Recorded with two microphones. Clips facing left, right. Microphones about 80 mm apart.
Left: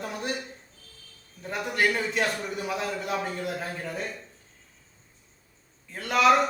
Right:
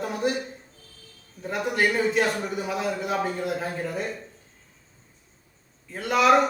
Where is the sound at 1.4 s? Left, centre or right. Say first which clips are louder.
Right 2 dB; centre.